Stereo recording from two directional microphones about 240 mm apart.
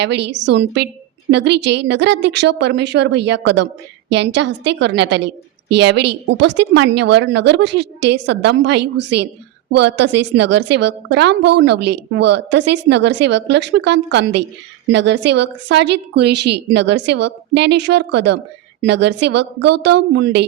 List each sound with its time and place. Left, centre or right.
0.0 s a woman's voice: right